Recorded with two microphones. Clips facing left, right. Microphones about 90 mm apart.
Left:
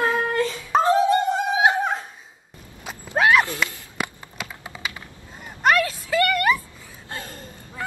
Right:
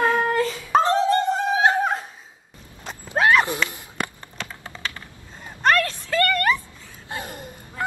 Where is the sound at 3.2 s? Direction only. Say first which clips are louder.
Even; centre (ahead or behind).